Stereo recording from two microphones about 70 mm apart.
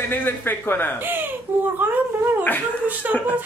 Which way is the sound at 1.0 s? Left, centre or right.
Right.